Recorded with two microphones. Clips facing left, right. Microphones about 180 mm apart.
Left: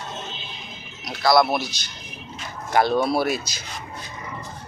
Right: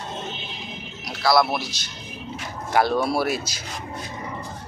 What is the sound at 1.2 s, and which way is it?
Speech, 5° right (ahead or behind).